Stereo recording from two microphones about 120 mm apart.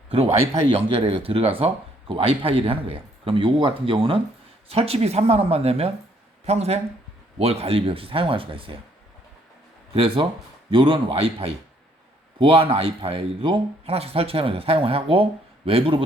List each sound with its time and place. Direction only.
0.1 s speech: 55° right (ahead or behind)
9.9 s speech: 50° right (ahead or behind)